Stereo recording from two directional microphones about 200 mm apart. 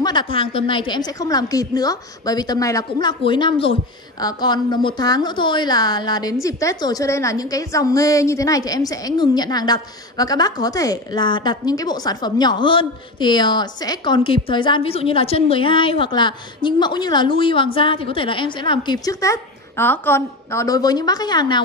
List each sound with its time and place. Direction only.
0.0 s a woman's voice: 25° left (ahead or behind)